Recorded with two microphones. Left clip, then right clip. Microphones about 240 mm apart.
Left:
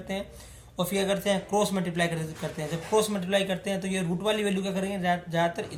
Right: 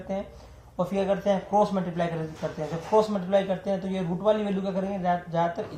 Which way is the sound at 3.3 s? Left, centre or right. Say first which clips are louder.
Right 2 dB; left.